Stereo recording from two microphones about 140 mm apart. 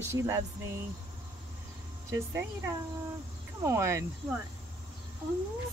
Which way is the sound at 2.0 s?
20° right (ahead or behind).